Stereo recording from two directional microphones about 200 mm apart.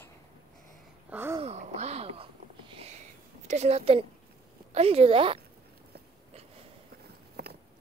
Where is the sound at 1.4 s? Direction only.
35° right (ahead or behind).